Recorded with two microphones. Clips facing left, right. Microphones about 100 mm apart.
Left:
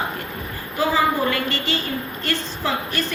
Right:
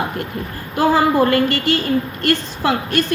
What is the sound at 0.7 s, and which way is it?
A woman's voice, 55° right (ahead or behind).